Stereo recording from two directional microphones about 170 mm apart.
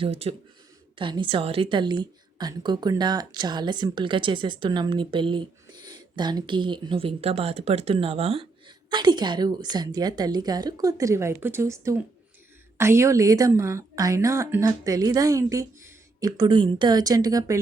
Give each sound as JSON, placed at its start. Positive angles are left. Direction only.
{"t": 0.0, "sound": "speech", "side_deg": -35}